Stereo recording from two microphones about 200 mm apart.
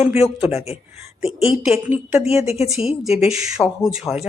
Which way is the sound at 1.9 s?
10° right (ahead or behind).